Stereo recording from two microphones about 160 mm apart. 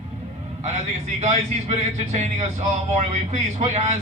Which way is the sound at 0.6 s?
45° right (ahead or behind).